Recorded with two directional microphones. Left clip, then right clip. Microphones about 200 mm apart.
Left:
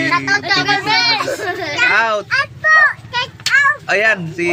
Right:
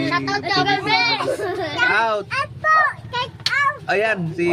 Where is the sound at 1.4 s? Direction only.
15° right (ahead or behind).